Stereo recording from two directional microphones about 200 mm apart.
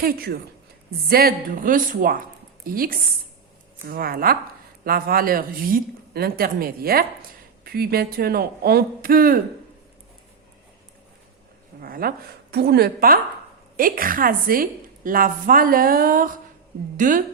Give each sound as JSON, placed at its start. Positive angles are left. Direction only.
{"t": 0.0, "sound": "a woman's voice", "side_deg": -50}
{"t": 11.8, "sound": "a woman's voice", "side_deg": -45}